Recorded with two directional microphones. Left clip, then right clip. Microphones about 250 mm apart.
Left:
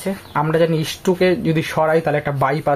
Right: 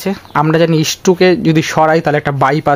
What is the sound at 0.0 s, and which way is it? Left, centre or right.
Speech, right.